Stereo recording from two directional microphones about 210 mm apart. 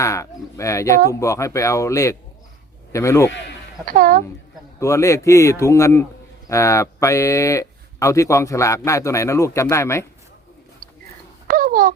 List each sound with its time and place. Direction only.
0.0 s speech: 15° left (ahead or behind)
3.8 s a woman's voice: 40° right (ahead or behind)
4.8 s speech: 15° left (ahead or behind)
11.4 s a sound: 40° right (ahead or behind)